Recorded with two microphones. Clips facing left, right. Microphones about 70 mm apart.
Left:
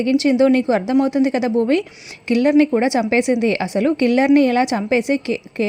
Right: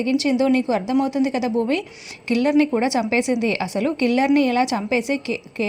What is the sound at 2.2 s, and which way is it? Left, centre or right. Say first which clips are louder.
A woman's voice: left 4 dB; left.